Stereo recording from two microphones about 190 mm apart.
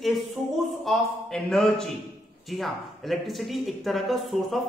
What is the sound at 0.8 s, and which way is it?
Speech, centre (ahead or behind).